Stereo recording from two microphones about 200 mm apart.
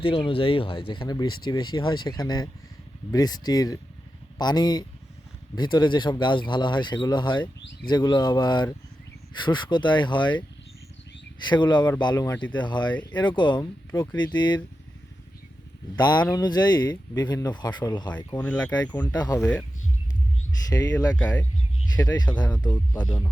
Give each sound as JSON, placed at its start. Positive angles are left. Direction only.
{"t": 0.0, "sound": "speech", "side_deg": 25}
{"t": 11.4, "sound": "speech", "side_deg": 20}
{"t": 16.3, "sound": "speech", "side_deg": 20}
{"t": 18.3, "sound": "speech", "side_deg": 5}
{"t": 18.7, "sound": "speech", "side_deg": 20}
{"t": 20.7, "sound": "speech", "side_deg": 20}
{"t": 21.2, "sound": "speech", "side_deg": 5}
{"t": 22.6, "sound": "speech", "side_deg": 20}